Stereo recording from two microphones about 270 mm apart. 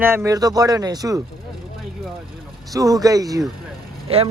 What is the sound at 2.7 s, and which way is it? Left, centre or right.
Speech, centre.